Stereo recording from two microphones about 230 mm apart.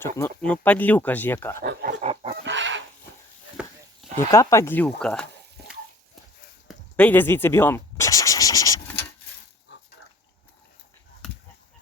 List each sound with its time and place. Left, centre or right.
0.2 s speech: centre
1.6 s speech: right
2.0 s chicken: right
2.4 s fowl: right
3.6 s a sound: centre
4.3 s speech: centre
6.7 s scratch: centre
9.7 s dog: left